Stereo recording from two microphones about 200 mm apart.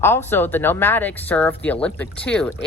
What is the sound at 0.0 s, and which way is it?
Speech, 10° left (ahead or behind).